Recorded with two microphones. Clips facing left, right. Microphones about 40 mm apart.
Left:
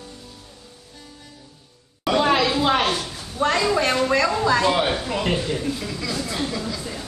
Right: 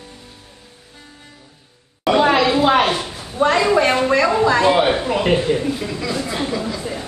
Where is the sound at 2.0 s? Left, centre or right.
Centre.